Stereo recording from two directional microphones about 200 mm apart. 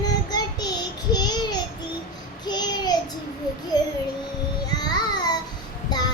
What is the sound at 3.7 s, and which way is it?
Speech, 20° left (ahead or behind).